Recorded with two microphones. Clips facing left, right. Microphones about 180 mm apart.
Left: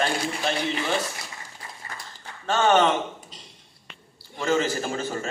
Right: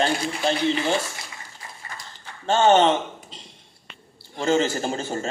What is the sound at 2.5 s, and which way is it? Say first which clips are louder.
Speech: right 3 dB; 30° right (ahead or behind).